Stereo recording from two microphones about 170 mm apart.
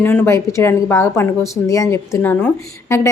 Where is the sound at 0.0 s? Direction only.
15° left (ahead or behind).